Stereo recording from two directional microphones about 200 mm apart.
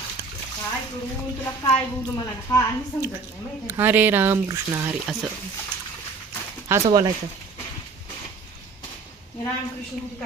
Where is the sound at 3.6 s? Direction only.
10° right (ahead or behind).